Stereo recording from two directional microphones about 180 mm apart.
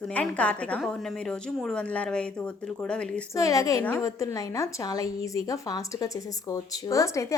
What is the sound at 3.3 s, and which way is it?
A woman's voice, 20° left (ahead or behind).